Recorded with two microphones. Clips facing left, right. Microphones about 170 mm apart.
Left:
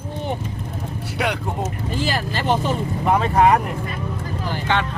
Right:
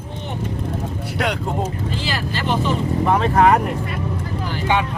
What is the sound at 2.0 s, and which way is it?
Speech, 50° left (ahead or behind).